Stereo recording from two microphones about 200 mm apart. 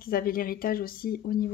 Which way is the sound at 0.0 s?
45° left (ahead or behind).